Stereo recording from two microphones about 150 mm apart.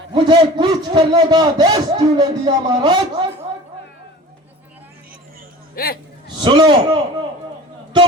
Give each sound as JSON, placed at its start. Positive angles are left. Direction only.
{"t": 0.1, "sound": "a man's voice", "side_deg": -30}
{"t": 5.7, "sound": "speech", "side_deg": 90}
{"t": 6.4, "sound": "a man's voice", "side_deg": -35}